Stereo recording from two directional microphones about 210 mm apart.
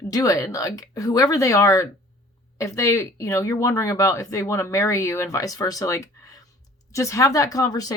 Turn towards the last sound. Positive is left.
turn(degrees=20)  # may be behind; listen again after turning